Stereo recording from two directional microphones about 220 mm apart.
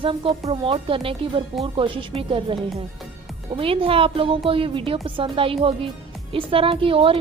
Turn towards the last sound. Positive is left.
turn(degrees=-25)  # may be behind; listen again after turning